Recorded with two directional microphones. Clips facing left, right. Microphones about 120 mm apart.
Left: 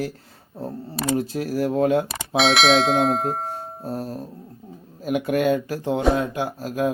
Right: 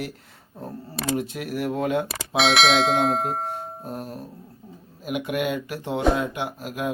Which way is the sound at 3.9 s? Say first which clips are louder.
Left 7 dB; 35° left (ahead or behind).